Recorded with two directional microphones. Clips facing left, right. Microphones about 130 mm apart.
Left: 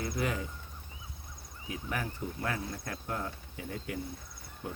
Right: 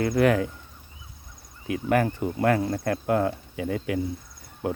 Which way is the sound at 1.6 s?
75° right (ahead or behind).